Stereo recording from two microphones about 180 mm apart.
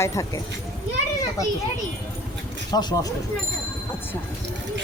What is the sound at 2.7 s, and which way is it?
Speech, 25° left (ahead or behind).